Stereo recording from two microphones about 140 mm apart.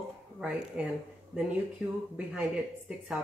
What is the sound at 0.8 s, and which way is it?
Speech, 10° right (ahead or behind).